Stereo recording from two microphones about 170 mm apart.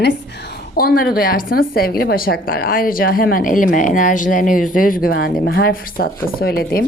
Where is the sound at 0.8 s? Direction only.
60° left (ahead or behind).